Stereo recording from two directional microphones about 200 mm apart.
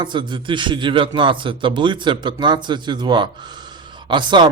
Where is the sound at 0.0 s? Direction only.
25° right (ahead or behind).